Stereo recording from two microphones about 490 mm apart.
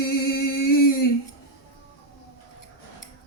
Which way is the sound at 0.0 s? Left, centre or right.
Left.